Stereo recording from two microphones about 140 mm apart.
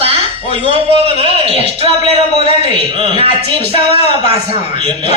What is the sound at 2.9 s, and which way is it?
Speech, 40° right (ahead or behind).